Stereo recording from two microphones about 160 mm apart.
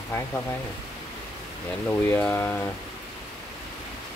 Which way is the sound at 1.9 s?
10° left (ahead or behind).